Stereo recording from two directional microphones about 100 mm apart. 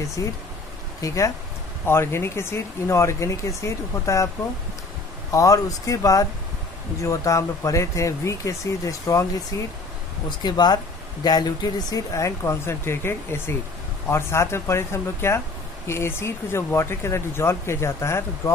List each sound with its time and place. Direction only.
0.2 s speech: 30° left (ahead or behind)
5.3 s speech: 35° left (ahead or behind)